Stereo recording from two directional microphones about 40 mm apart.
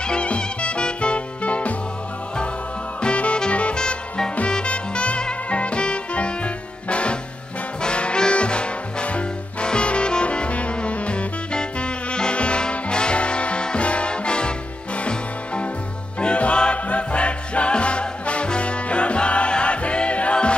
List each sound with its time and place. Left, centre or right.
0.0 s music: left
3.0 s music: left